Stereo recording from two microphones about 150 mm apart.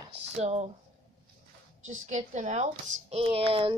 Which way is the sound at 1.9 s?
55° right (ahead or behind).